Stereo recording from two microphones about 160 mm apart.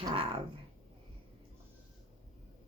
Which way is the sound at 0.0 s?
35° right (ahead or behind).